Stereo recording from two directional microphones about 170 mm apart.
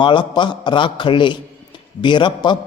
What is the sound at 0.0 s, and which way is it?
A man's voice, 30° left (ahead or behind).